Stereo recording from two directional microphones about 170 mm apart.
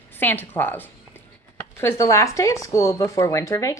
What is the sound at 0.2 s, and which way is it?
A woman's voice, 10° left (ahead or behind).